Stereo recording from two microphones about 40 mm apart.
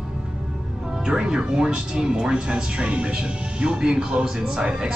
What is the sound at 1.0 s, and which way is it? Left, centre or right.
Speech, centre.